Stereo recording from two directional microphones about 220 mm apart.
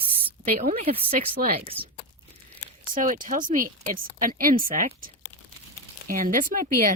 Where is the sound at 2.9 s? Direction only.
35° right (ahead or behind).